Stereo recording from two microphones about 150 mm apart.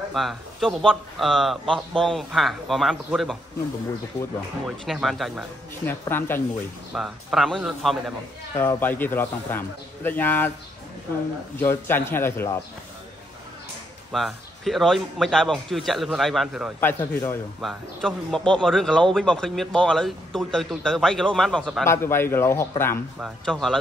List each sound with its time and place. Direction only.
0.1 s speech: centre (ahead or behind)
4.6 s speech: centre (ahead or behind)
5.9 s a man's voice: 15° left (ahead or behind)
6.9 s speech: centre (ahead or behind)
8.5 s a man's voice: 15° left (ahead or behind)
11.6 s a man's voice: 15° left (ahead or behind)
14.1 s speech: centre (ahead or behind)
16.8 s a man's voice: 15° left (ahead or behind)
17.6 s speech: centre (ahead or behind)
21.8 s a man's voice: 15° left (ahead or behind)
23.2 s speech: centre (ahead or behind)